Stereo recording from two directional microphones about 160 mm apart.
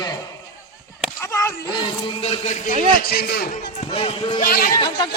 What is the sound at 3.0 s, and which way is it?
Speech, 80° left.